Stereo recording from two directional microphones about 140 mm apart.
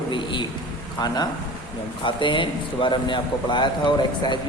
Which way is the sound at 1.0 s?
30° left (ahead or behind).